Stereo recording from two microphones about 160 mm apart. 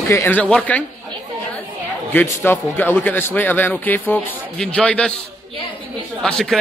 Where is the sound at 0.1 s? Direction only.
15° left (ahead or behind).